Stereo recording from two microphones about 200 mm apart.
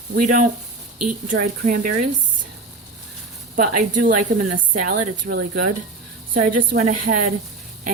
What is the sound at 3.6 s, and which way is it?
A woman's voice, 45° right (ahead or behind).